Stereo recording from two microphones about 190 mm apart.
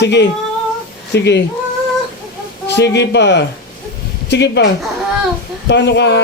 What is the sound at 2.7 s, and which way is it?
Speech, 65° left (ahead or behind).